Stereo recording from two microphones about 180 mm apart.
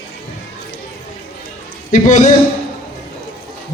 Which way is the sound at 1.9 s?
45° left (ahead or behind).